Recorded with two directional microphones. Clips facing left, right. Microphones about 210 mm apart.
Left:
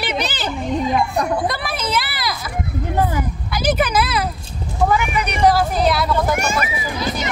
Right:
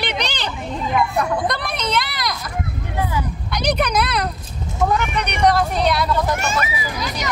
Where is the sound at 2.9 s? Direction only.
45° left (ahead or behind).